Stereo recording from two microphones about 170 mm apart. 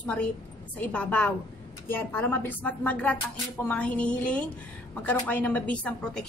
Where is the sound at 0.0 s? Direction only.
5° left (ahead or behind).